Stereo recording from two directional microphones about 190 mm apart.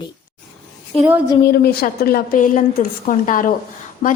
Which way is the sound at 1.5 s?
55° left (ahead or behind).